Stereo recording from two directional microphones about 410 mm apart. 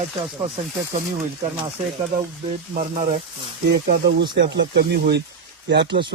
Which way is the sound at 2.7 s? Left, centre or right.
Centre.